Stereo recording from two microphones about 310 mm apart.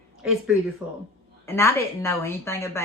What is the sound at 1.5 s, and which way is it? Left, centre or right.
Speech, centre.